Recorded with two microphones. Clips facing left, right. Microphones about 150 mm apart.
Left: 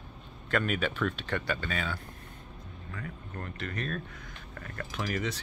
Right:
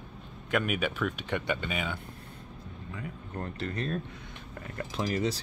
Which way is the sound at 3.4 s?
30° right (ahead or behind).